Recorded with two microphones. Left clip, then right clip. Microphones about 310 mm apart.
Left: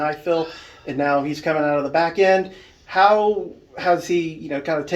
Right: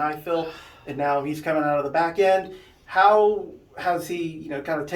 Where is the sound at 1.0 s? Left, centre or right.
Left.